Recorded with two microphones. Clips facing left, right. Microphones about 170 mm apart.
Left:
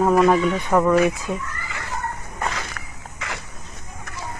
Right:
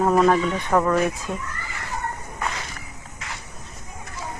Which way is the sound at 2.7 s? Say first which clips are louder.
Left 2 dB; 90° left.